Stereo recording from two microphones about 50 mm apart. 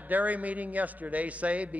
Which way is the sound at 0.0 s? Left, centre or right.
Right.